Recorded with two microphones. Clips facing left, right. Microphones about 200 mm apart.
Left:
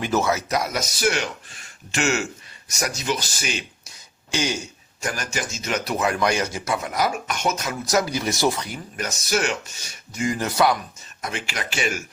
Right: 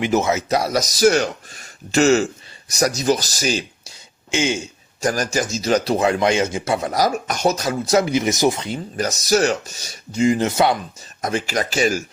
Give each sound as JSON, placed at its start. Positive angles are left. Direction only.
{"t": 0.0, "sound": "speech", "side_deg": -20}
{"t": 4.3, "sound": "a man's voice", "side_deg": -25}
{"t": 4.9, "sound": "speech", "side_deg": -40}
{"t": 9.0, "sound": "speech", "side_deg": -40}
{"t": 11.2, "sound": "speech", "side_deg": -40}